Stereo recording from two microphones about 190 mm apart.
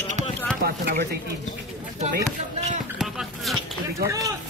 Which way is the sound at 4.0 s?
15° right (ahead or behind).